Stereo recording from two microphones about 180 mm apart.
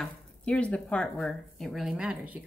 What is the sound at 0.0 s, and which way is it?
A woman's voice, 5° left (ahead or behind).